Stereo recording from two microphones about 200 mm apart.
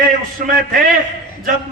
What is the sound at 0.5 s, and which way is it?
Speech, 45° right (ahead or behind).